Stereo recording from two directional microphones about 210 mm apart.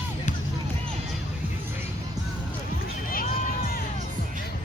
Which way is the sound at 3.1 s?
40° left (ahead or behind).